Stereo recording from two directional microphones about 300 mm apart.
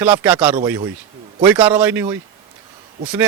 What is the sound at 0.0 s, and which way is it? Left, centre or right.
Speech, centre.